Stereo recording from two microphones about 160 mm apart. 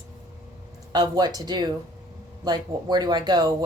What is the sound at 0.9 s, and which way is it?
Speech, 25° right (ahead or behind).